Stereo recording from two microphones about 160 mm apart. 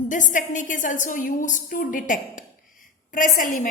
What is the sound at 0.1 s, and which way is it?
A woman's voice, 50° left (ahead or behind).